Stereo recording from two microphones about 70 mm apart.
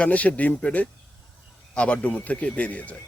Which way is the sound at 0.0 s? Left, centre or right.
Centre.